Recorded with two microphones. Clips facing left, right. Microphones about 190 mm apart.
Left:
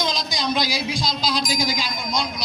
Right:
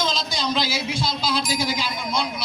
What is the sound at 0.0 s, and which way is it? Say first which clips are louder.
Speech: even; 15° left (ahead or behind).